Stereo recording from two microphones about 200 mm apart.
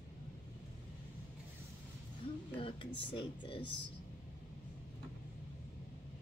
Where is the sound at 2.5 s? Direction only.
25° left (ahead or behind).